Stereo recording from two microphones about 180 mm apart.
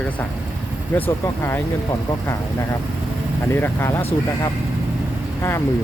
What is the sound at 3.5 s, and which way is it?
Speech, 10° left (ahead or behind).